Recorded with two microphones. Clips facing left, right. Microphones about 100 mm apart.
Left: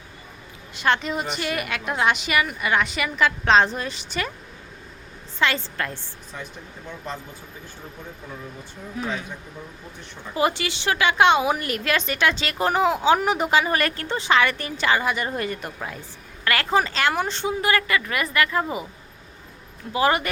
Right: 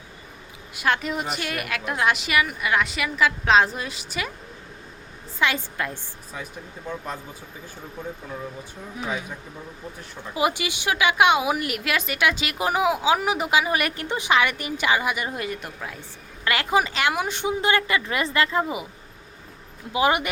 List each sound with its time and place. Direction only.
0.7 s a woman's voice: 5° right (ahead or behind)
5.4 s a woman's voice: 10° right (ahead or behind)
9.0 s a woman's voice: 15° right (ahead or behind)
10.3 s a woman's voice: 10° right (ahead or behind)
16.4 s a woman's voice: 15° right (ahead or behind)
19.9 s a woman's voice: 15° right (ahead or behind)